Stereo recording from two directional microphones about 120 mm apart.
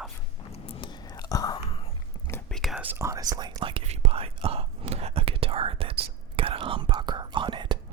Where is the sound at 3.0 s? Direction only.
30° right (ahead or behind).